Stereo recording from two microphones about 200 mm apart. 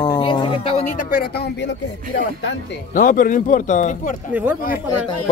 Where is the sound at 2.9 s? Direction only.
40° left (ahead or behind).